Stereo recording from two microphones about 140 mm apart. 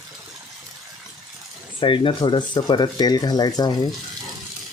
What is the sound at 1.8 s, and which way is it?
Speech, 40° left (ahead or behind).